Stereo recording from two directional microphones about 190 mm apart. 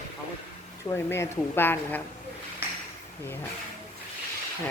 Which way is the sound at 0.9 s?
10° left (ahead or behind).